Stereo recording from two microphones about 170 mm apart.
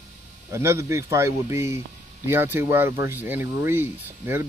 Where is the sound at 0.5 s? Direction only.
15° right (ahead or behind).